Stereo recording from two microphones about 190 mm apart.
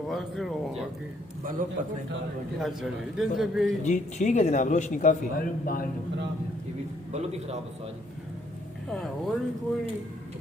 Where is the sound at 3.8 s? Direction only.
40° left (ahead or behind).